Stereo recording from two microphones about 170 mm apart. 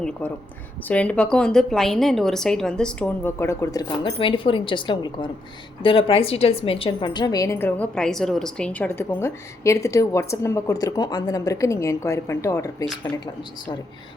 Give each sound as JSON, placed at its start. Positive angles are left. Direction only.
{"t": 0.2, "sound": "a woman's voice", "side_deg": 10}